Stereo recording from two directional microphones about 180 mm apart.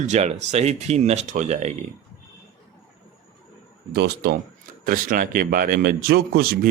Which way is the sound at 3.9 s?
60° right (ahead or behind).